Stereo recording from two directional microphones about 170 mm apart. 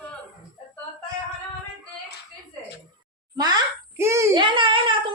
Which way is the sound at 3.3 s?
25° right (ahead or behind).